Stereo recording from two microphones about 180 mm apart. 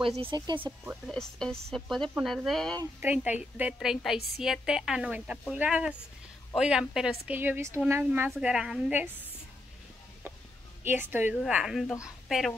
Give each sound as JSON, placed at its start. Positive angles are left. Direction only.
{"t": 0.0, "sound": "speech", "side_deg": -30}
{"t": 0.6, "sound": "a woman's voice", "side_deg": -10}
{"t": 1.0, "sound": "a woman's voice", "side_deg": 5}
{"t": 3.0, "sound": "a woman's voice", "side_deg": -10}
{"t": 10.8, "sound": "a woman's voice", "side_deg": -10}